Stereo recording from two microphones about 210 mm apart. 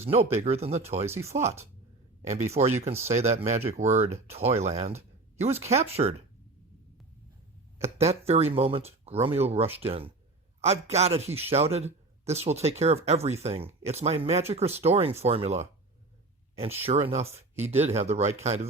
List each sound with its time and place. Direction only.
0.0 s speech: 30° right (ahead or behind)
7.9 s speech: 30° right (ahead or behind)
16.8 s speech: 30° right (ahead or behind)